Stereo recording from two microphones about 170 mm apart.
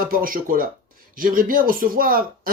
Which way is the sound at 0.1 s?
55° right (ahead or behind).